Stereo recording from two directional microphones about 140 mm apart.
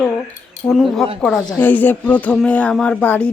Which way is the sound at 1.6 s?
15° left (ahead or behind).